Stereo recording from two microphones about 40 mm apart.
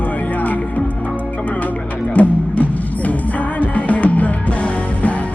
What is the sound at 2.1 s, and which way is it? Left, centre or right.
Music, left.